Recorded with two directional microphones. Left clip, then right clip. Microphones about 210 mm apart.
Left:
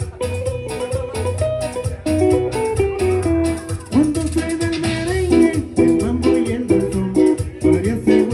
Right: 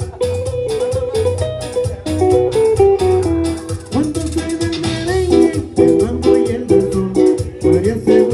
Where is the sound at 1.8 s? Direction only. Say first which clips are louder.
Right 6 dB; 5° right (ahead or behind).